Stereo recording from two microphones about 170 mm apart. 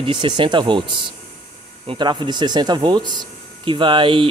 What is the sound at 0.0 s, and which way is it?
Speech, 30° right (ahead or behind).